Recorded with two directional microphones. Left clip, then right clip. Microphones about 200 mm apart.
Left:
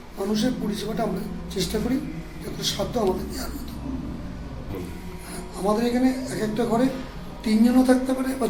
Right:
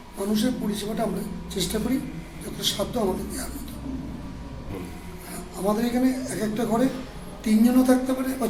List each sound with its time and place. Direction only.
0.2 s a man's voice: centre (ahead or behind)
5.6 s a man's voice: centre (ahead or behind)